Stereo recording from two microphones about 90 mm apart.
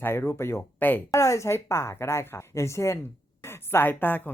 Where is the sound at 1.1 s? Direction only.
35° left (ahead or behind).